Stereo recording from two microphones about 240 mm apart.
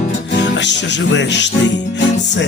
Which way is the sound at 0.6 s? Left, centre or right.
Left.